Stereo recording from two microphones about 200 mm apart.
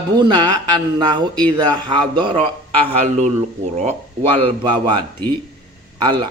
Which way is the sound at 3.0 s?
35° right (ahead or behind).